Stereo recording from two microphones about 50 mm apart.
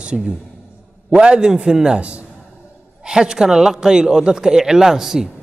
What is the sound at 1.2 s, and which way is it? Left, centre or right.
A man's voice, centre.